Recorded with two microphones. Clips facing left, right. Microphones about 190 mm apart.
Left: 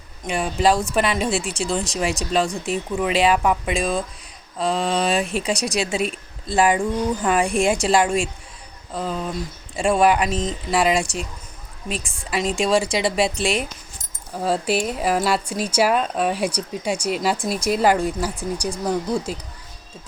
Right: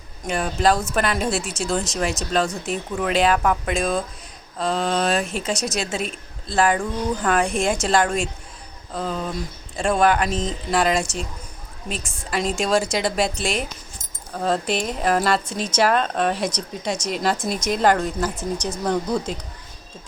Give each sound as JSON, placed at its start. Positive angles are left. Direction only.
{"t": 0.3, "sound": "a woman's voice", "side_deg": 0}
{"t": 5.8, "sound": "a woman's voice", "side_deg": -40}
{"t": 6.5, "sound": "a woman's voice", "side_deg": 10}
{"t": 14.3, "sound": "speech", "side_deg": 5}